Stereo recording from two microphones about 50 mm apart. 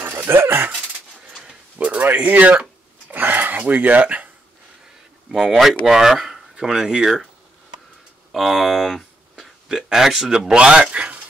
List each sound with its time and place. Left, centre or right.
0.3 s speech: right
1.8 s speech: right
3.1 s a sound: right
5.3 s speech: centre
8.3 s speech: centre; by 11.2 s right